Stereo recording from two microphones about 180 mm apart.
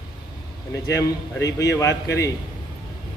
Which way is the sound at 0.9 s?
15° left (ahead or behind).